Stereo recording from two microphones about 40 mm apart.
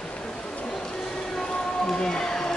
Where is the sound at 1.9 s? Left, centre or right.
Centre.